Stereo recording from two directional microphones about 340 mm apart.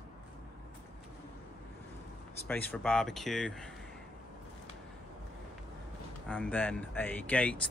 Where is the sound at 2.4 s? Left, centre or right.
Centre.